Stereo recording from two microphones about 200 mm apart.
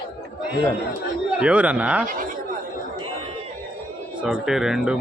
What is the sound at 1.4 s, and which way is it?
Speech, 5° right (ahead or behind).